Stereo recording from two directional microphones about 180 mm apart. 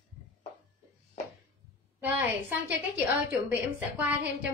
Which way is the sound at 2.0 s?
10° right (ahead or behind).